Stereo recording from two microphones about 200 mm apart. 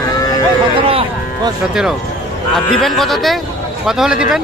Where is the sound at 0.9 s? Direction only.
30° right (ahead or behind).